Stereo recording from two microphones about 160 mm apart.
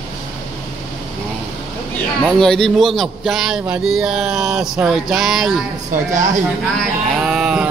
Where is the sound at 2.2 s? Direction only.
Centre (ahead or behind).